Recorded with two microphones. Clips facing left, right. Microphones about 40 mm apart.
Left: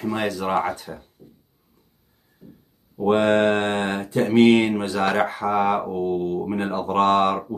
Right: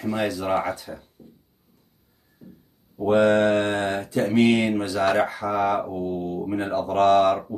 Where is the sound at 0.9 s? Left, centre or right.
Centre.